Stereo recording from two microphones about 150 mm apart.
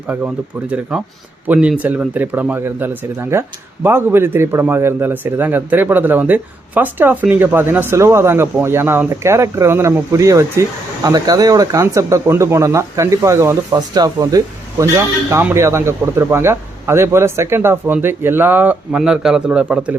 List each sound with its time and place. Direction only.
0.7 s a man's voice: 5° right (ahead or behind)